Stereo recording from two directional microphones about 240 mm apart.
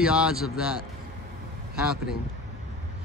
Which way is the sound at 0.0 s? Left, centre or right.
Centre.